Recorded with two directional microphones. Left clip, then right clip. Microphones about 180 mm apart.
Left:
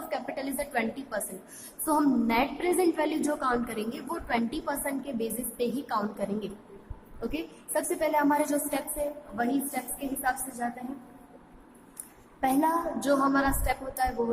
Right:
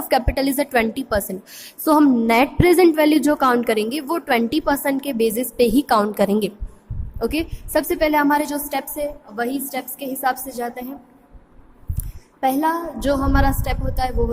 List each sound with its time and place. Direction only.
0.1 s a woman's voice: 45° right (ahead or behind)
12.4 s a woman's voice: 35° right (ahead or behind)